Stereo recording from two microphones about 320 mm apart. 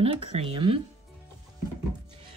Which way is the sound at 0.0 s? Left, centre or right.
Centre.